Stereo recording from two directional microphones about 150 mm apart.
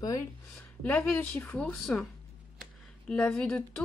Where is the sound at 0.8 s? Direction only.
10° left (ahead or behind).